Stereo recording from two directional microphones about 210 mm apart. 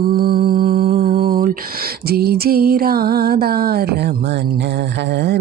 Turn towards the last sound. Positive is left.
turn(degrees=-55)  # may be behind; listen again after turning